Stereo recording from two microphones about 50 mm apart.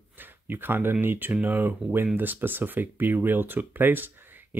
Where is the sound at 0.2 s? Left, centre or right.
Right.